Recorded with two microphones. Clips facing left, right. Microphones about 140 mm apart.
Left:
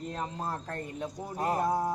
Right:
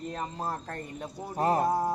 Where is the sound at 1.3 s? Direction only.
35° right (ahead or behind).